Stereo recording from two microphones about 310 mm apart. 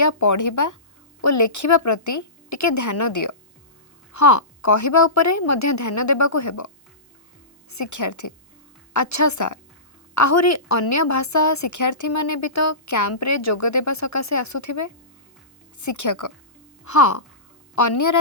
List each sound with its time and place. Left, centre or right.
0.0 s speech: left
1.2 s a woman's voice: left
7.7 s a woman's voice: left